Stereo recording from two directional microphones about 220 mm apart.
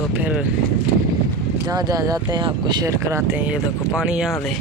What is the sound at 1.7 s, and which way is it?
Speech, 15° right (ahead or behind).